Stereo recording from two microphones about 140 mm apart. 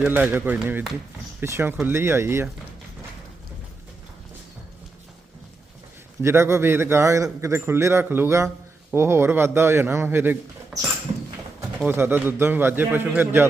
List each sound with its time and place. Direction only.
0.0 s a man's voice: 15° right (ahead or behind)
6.2 s a man's voice: 20° right (ahead or behind)
11.9 s a man's voice: 15° right (ahead or behind)